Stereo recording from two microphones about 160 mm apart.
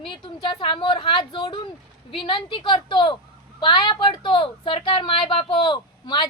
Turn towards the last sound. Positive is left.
turn(degrees=30)  # may be behind; listen again after turning